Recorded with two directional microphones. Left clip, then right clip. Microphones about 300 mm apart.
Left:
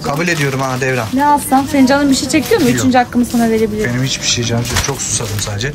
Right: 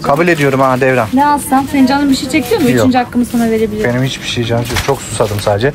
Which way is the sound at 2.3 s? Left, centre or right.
Centre.